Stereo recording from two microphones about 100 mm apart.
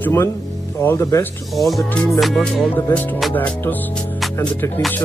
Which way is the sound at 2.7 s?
20° left (ahead or behind).